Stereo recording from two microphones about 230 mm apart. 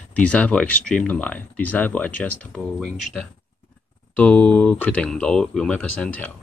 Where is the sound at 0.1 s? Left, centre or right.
Centre.